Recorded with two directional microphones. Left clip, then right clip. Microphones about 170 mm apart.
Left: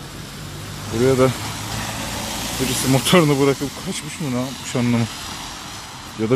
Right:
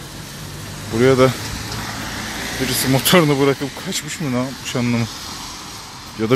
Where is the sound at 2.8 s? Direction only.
Centre (ahead or behind).